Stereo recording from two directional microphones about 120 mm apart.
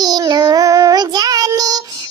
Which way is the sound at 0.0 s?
35° right (ahead or behind).